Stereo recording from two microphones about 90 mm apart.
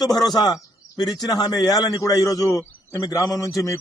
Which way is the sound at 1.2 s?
45° left (ahead or behind).